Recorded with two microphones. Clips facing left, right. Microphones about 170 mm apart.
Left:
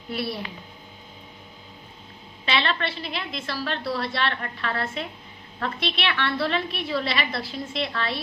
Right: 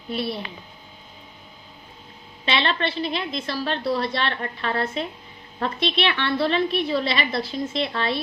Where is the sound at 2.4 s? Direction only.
25° right (ahead or behind).